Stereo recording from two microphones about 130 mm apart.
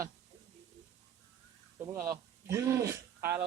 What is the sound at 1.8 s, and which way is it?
Speech, 25° right (ahead or behind).